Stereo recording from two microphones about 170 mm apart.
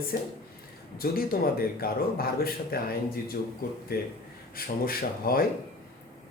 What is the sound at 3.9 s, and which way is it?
A man's voice, 60° left (ahead or behind).